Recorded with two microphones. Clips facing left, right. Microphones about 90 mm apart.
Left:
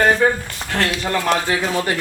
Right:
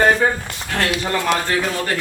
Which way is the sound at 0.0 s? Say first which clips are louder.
Even; 5° right (ahead or behind).